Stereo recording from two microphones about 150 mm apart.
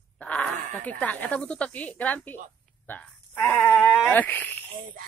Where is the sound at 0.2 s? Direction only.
10° left (ahead or behind).